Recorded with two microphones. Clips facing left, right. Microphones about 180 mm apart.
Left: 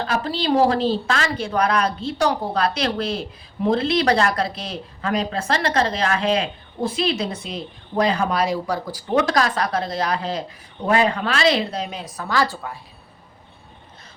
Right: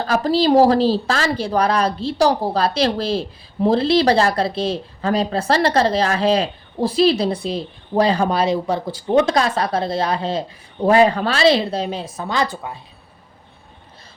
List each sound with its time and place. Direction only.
0.1 s a woman's voice: 40° right (ahead or behind); by 12.8 s 20° right (ahead or behind)